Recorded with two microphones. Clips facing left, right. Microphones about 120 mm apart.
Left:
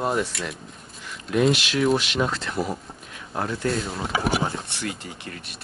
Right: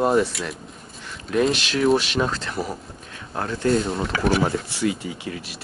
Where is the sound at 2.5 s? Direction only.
Centre (ahead or behind).